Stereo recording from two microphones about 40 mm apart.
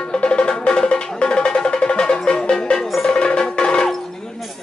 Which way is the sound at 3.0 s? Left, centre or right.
Left.